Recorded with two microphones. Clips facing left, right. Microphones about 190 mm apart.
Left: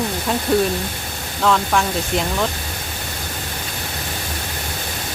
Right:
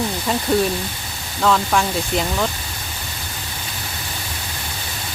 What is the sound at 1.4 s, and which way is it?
Speech, centre (ahead or behind).